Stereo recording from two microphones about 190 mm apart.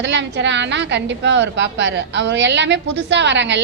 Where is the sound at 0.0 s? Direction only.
70° right (ahead or behind).